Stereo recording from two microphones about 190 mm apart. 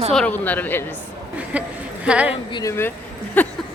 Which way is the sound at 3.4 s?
5° left (ahead or behind).